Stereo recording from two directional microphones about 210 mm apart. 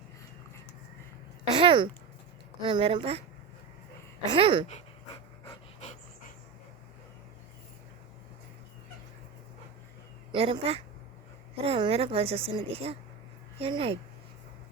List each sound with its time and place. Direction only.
1.5 s a woman's voice: 25° right (ahead or behind)
4.3 s a woman's voice: 25° right (ahead or behind)
5.5 s pant: 35° left (ahead or behind)
10.3 s a woman's voice: 25° right (ahead or behind)